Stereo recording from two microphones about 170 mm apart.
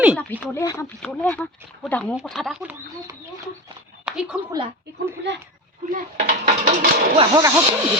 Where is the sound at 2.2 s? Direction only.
Centre (ahead or behind).